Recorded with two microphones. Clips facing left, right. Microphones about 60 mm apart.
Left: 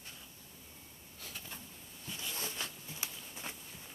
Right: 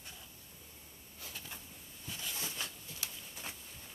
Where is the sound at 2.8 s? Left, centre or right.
Left.